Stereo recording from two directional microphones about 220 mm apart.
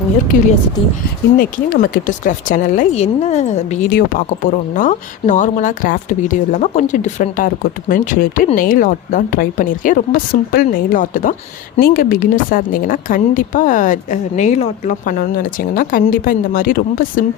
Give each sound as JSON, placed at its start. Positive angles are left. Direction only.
{"t": 1.4, "sound": "speech", "side_deg": 40}